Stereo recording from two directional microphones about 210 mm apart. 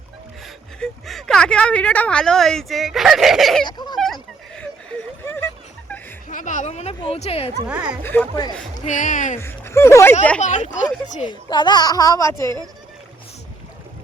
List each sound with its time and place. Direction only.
0.4 s speech: centre (ahead or behind)
3.7 s a sound: 20° left (ahead or behind)
3.9 s a sound: centre (ahead or behind)
6.2 s speech: 40° left (ahead or behind)
7.7 s speech: 5° right (ahead or behind)
8.0 s a child's voice: 10° left (ahead or behind)
8.9 s speech: 35° left (ahead or behind)
9.4 s speech: 10° left (ahead or behind)
10.4 s speech: 35° left (ahead or behind)
11.3 s a child's voice: 20° left (ahead or behind)